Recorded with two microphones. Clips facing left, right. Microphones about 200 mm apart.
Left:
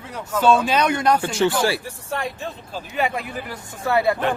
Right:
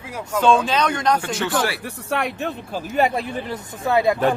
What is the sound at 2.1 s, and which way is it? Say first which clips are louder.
Speech: right 4 dB; 70° right (ahead or behind).